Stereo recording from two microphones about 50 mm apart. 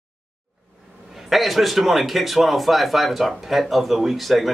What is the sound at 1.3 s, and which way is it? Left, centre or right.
Speech, centre.